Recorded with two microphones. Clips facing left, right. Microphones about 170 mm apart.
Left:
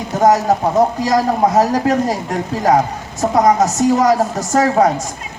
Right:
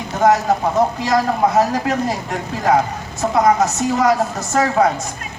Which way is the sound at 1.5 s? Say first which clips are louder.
Left 3 dB; 40° left (ahead or behind).